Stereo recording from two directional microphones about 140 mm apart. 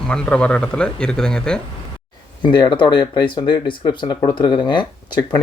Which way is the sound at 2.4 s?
35° left (ahead or behind).